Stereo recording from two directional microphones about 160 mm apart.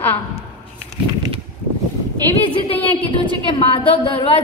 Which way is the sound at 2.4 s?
35° left (ahead or behind).